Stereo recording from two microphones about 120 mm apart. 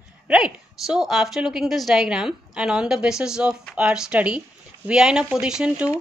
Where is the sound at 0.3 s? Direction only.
5° right (ahead or behind).